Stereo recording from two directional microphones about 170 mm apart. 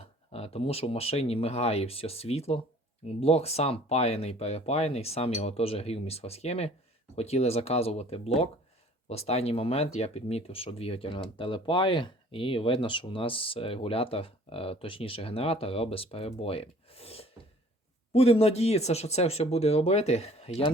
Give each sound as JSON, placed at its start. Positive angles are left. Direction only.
{"t": 0.3, "sound": "speech", "side_deg": 35}